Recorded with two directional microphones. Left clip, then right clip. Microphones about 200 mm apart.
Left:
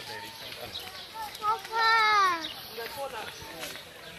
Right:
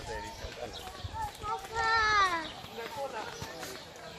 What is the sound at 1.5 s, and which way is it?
Speech, 40° left (ahead or behind).